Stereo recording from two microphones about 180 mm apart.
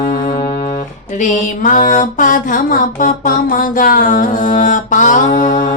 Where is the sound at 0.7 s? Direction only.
45° left (ahead or behind).